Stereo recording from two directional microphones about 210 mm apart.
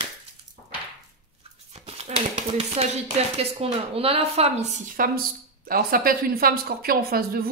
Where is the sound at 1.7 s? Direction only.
30° right (ahead or behind).